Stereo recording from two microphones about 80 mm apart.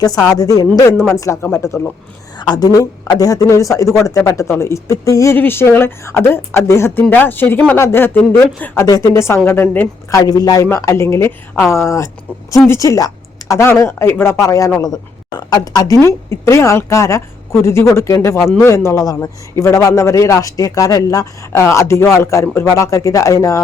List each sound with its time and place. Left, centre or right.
0.3 s a man's voice: left
2.4 s a man's voice: left
5.3 s a man's voice: left
7.1 s a woman's voice: left
8.8 s speech: left
9.4 s a woman's voice: left
10.1 s speech: left
10.7 s a man's voice: left
14.3 s speech: left
16.0 s a man's voice: left